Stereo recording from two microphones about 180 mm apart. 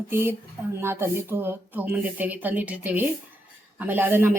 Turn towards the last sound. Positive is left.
turn(degrees=-10)  # may be behind; listen again after turning